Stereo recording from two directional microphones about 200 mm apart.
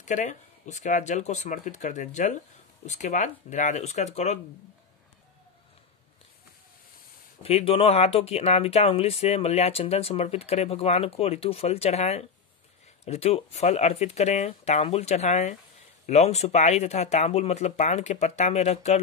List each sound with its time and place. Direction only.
0.0 s speech: 35° left (ahead or behind)
7.4 s speech: 30° left (ahead or behind)